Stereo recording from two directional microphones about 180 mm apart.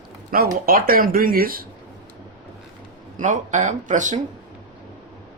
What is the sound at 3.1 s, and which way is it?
Speech, 45° right (ahead or behind).